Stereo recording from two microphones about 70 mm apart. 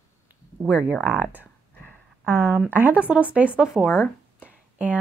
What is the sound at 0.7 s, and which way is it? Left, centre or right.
Speech, centre.